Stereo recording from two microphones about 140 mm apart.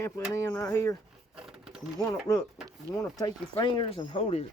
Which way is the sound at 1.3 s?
5° right (ahead or behind).